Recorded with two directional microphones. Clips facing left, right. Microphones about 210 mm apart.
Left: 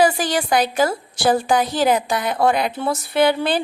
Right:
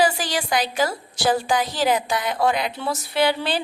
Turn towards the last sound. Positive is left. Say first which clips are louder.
# left 4 dB
turn(degrees=50)  # may be behind; listen again after turning